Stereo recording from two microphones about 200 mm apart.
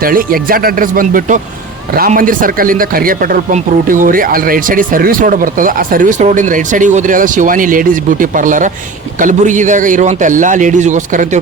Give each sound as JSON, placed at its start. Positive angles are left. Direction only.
{"t": 0.0, "sound": "a man's voice", "side_deg": -45}